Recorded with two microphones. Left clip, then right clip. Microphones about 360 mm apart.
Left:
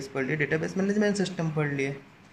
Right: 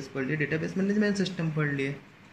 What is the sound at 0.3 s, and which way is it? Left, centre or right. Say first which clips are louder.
Speech: left 2 dB; centre.